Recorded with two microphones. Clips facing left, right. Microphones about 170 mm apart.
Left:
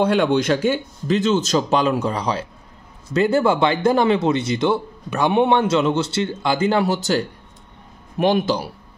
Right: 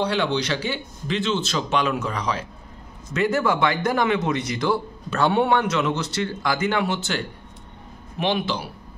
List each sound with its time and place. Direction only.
0.0 s a man's voice: 50° left (ahead or behind)